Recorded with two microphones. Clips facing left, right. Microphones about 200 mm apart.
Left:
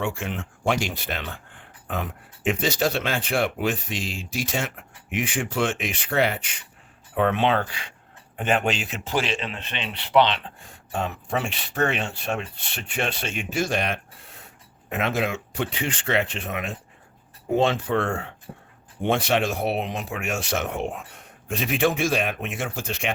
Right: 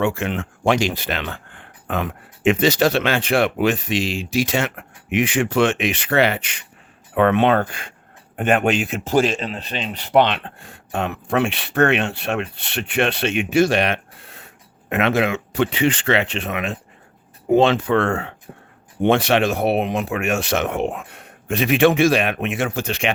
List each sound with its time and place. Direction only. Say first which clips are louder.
0.0 s speech: right 7 dB; 70° right (ahead or behind)
7.1 s speech: right 6 dB; 65° right (ahead or behind); by 18.3 s 85° right
19.0 s speech: right 6 dB; 70° right (ahead or behind)